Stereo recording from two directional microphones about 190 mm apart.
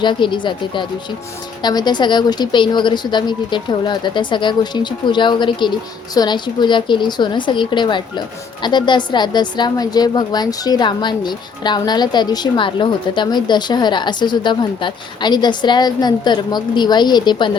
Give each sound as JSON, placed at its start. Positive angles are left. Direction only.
{"t": 0.0, "sound": "a woman's voice", "side_deg": 25}